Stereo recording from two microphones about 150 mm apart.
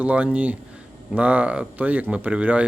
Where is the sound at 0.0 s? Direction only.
10° right (ahead or behind).